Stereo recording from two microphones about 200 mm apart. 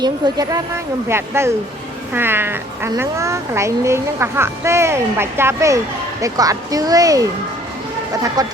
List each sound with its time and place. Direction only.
0.0 s speech: 20° right (ahead or behind)
8.4 s speech: 20° right (ahead or behind)